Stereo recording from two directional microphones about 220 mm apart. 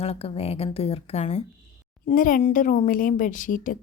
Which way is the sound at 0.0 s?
25° left (ahead or behind).